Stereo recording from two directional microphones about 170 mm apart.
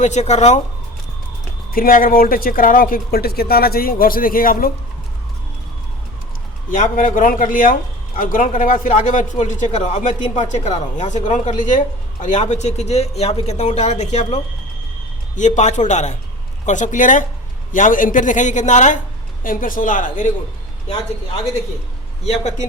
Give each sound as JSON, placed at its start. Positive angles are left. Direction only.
{"t": 0.0, "sound": "a man's voice", "side_deg": 40}
{"t": 1.7, "sound": "speech", "side_deg": 55}
{"t": 6.7, "sound": "a man's voice", "side_deg": 50}